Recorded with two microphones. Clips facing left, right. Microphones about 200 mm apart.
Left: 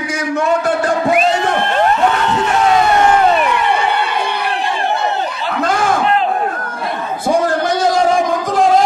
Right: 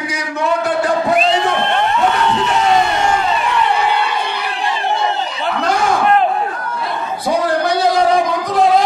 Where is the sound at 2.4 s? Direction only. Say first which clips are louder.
Left 3 dB; 50° left (ahead or behind).